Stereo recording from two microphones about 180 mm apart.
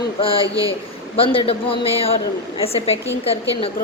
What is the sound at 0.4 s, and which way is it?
Speech, 20° right (ahead or behind).